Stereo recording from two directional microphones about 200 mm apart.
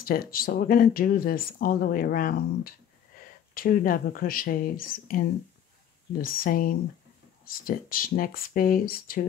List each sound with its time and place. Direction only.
0.0 s speech: 45° left (ahead or behind)
6.2 s speech: 45° left (ahead or behind)